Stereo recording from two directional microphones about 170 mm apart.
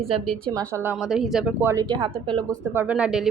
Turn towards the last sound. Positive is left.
turn(degrees=-5)  # may be behind; listen again after turning